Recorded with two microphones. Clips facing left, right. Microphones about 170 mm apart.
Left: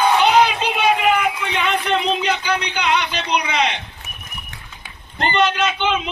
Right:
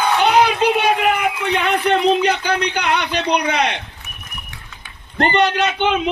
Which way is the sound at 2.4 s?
60° right (ahead or behind).